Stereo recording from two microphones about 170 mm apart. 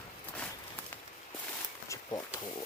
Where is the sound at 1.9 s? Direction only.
20° left (ahead or behind).